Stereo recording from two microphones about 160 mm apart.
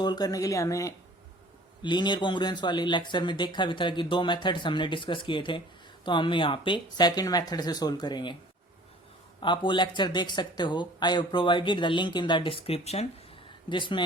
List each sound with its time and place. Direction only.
0.0 s speech: 25° left (ahead or behind)
9.4 s speech: 30° left (ahead or behind)
13.7 s speech: 30° left (ahead or behind)